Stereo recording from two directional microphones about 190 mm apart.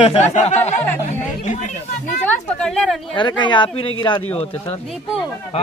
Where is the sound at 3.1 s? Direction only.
25° left (ahead or behind).